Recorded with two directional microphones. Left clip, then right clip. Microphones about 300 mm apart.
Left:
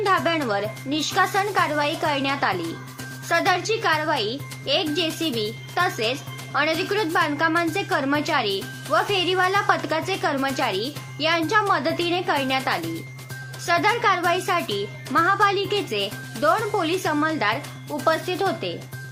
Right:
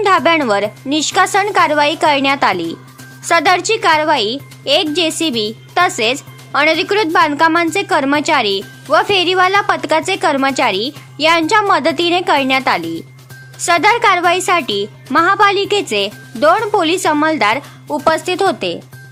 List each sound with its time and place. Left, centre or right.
0.0 s speech: right